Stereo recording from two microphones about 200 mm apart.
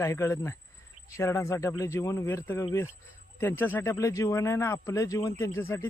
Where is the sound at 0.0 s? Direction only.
15° left (ahead or behind).